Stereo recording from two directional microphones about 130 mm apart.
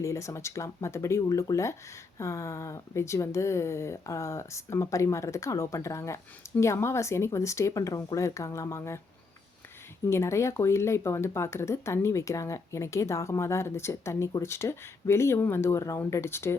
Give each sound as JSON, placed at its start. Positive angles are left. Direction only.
{"t": 0.0, "sound": "speech", "side_deg": 25}
{"t": 10.1, "sound": "speech", "side_deg": 20}